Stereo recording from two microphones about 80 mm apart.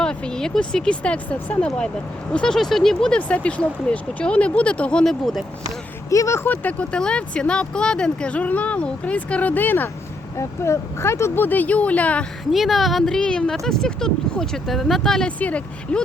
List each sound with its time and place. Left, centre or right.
0.0 s speech: centre
6.1 s speech: left
6.4 s speech: left
10.3 s speech: left; by 12.2 s centre
12.5 s speech: centre
15.4 s speech: centre